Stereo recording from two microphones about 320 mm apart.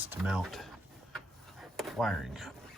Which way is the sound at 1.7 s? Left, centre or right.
Centre.